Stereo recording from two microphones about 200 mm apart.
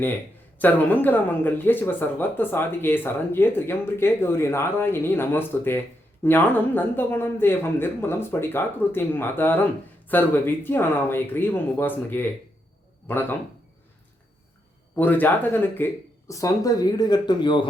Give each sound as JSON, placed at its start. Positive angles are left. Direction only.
{"t": 0.6, "sound": "a man's voice", "side_deg": 10}
{"t": 14.9, "sound": "speech", "side_deg": 10}